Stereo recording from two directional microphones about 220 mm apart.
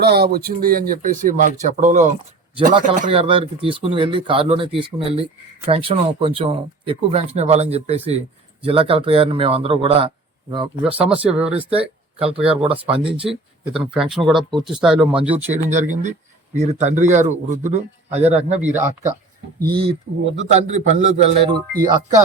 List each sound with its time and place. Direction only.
0.0 s speech: 45° right (ahead or behind); by 10.9 s 20° right (ahead or behind)
11.2 s speech: 5° right (ahead or behind)
11.4 s speech: 25° right (ahead or behind)
13.3 s speech: 5° right (ahead or behind)
15.7 s speech: 35° right (ahead or behind)
18.7 s speech: 10° right (ahead or behind)
19.5 s speech: 45° right (ahead or behind)
19.9 s speech: 55° right (ahead or behind)
20.5 s speech: 30° right (ahead or behind)